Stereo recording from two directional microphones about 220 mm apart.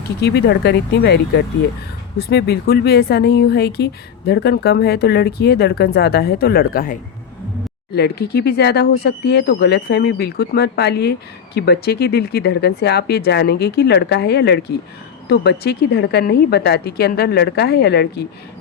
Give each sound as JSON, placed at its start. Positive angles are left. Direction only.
{"t": 0.2, "sound": "speech", "side_deg": 50}
{"t": 7.9, "sound": "speech", "side_deg": 45}